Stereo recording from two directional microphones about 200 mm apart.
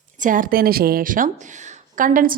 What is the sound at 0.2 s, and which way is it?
A woman's voice, 40° right (ahead or behind).